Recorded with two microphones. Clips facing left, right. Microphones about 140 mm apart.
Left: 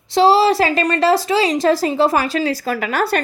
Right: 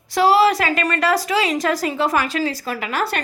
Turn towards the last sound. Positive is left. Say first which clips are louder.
# left 4 dB
turn(degrees=40)  # may be behind; listen again after turning